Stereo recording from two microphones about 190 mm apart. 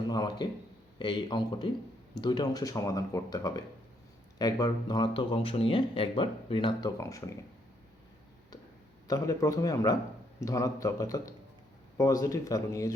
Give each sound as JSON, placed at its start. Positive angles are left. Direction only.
{"t": 0.1, "sound": "speech", "side_deg": 20}
{"t": 9.0, "sound": "speech", "side_deg": 15}